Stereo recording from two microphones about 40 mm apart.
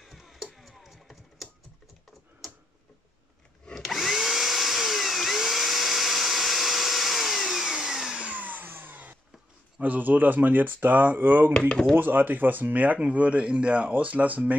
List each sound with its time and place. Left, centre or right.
0.0 s tick-tock: centre
0.6 s a sound: centre
3.7 s drill: centre
8.4 s music: right
8.6 s a sound: right
9.8 s speech: right